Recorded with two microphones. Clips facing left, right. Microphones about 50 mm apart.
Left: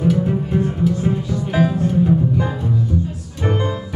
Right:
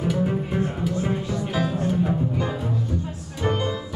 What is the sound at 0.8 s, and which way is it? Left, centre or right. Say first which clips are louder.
Music: left 7 dB; centre.